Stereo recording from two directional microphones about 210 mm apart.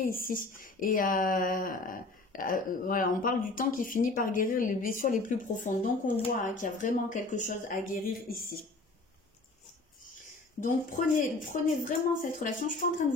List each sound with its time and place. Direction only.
0.0 s speech: 40° left (ahead or behind)
10.6 s speech: 35° left (ahead or behind)